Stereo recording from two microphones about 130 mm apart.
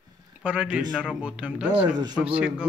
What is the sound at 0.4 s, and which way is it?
Speech, 10° right (ahead or behind).